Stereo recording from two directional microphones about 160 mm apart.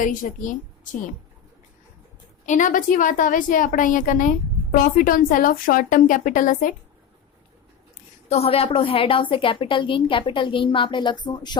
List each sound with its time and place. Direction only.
0.0 s a woman's voice: 55° left (ahead or behind)
2.5 s a woman's voice: 55° left (ahead or behind)
8.3 s a woman's voice: 40° left (ahead or behind)